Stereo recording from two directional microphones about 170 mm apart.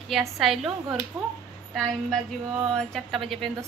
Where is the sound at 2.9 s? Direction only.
Centre (ahead or behind).